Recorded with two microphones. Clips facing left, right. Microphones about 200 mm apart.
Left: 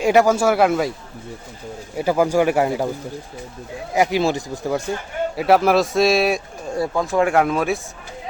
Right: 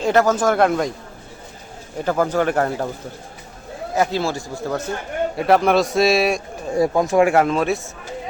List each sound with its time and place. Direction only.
0.0 s speech: 10° left (ahead or behind)
2.0 s speech: 10° left (ahead or behind)
3.9 s speech: 15° left (ahead or behind)
5.4 s a man's voice: 5° left (ahead or behind)
6.7 s speech: 15° right (ahead or behind)
7.3 s a man's voice: centre (ahead or behind)